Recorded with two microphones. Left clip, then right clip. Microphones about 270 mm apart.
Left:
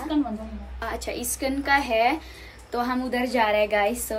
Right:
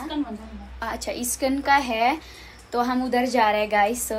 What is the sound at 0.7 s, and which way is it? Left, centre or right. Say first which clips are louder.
A woman's voice: right 1 dB; centre.